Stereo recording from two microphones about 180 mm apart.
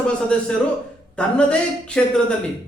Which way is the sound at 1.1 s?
5° left (ahead or behind).